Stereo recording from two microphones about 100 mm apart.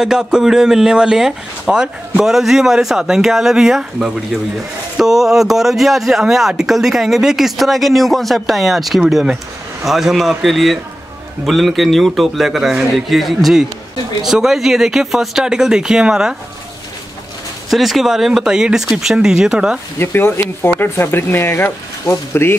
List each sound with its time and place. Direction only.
0.0 s speech: 5° right (ahead or behind)
17.6 s speech: centre (ahead or behind)
20.0 s speech: 20° left (ahead or behind)